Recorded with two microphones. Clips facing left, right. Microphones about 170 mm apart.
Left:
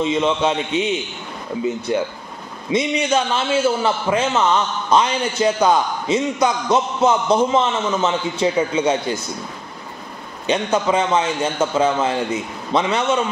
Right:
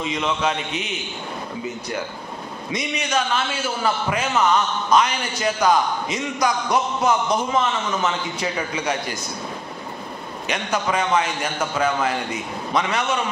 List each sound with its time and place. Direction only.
0.0 s a man's voice: 30° left (ahead or behind)
1.9 s a man's voice: 25° left (ahead or behind)
10.4 s a man's voice: 25° left (ahead or behind)